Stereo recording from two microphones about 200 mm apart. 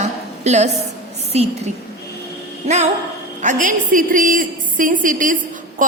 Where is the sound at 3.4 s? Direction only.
40° right (ahead or behind).